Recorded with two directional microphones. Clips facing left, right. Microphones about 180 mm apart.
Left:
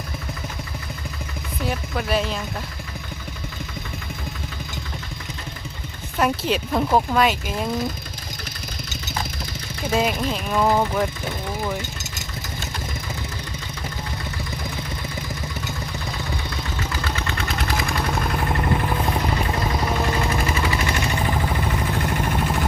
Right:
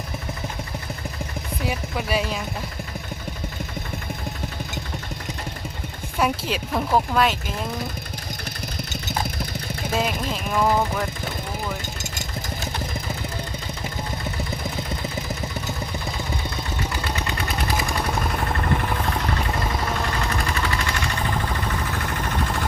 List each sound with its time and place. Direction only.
1.6 s speech: 5° right (ahead or behind)
6.1 s speech: 5° right (ahead or behind)
9.9 s speech: 5° left (ahead or behind)
17.2 s vehicle: 10° right (ahead or behind)
18.5 s a sound: 10° left (ahead or behind)
20.3 s vehicle: 5° left (ahead or behind)
20.7 s machine gun: 20° left (ahead or behind)
21.3 s a sound: 10° left (ahead or behind)
22.2 s vehicle: 10° left (ahead or behind)